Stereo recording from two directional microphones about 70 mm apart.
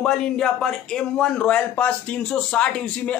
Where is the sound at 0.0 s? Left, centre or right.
Centre.